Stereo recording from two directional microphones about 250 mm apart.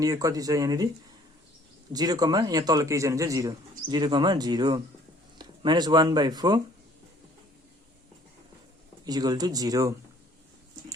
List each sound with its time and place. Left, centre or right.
0.0 s a man's voice: centre
1.9 s a man's voice: centre
9.0 s a man's voice: centre